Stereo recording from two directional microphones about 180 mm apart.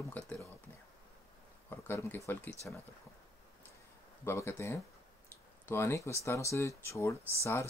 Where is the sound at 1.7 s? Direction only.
10° left (ahead or behind).